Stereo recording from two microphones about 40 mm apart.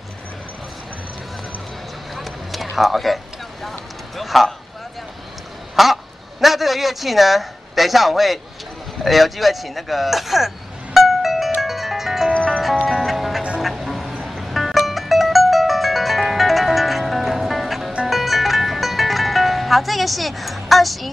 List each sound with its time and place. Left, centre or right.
2.1 s run: centre
4.2 s speech: centre
5.8 s a man's voice: centre
9.0 s vehicle: centre
12.4 s music: centre